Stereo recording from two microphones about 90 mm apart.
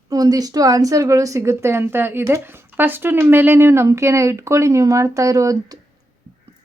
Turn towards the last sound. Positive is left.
turn(degrees=-40)  # may be behind; listen again after turning